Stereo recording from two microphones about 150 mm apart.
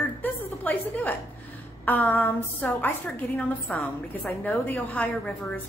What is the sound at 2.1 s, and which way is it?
Speech, 15° left (ahead or behind).